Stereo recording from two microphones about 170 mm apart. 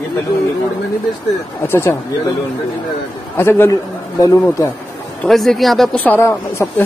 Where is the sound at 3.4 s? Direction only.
15° left (ahead or behind).